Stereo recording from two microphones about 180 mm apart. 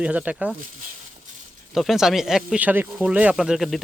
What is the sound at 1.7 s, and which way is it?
Speech, centre (ahead or behind).